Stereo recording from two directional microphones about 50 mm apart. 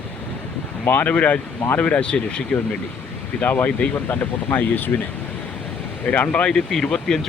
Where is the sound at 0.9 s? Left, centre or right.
Left.